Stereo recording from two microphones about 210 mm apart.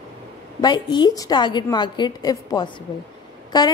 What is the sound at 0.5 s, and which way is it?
A woman's voice, 20° left (ahead or behind).